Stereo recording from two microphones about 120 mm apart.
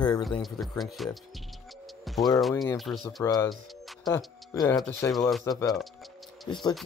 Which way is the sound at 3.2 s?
30° left (ahead or behind).